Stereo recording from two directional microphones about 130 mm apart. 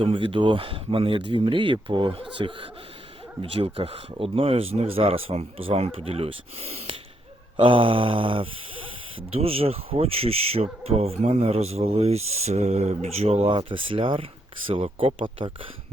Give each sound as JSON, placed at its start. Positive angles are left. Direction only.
{"t": 0.0, "sound": "speech", "side_deg": -45}
{"t": 7.5, "sound": "mantra", "side_deg": -40}
{"t": 9.3, "sound": "speech", "side_deg": -50}